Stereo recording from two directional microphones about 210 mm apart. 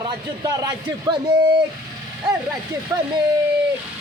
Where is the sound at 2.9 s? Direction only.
15° right (ahead or behind).